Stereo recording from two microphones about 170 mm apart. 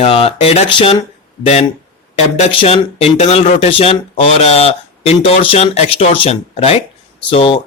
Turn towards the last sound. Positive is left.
turn(degrees=30)  # may be behind; listen again after turning